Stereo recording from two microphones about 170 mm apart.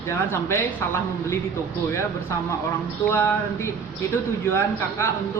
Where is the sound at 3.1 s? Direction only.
15° left (ahead or behind).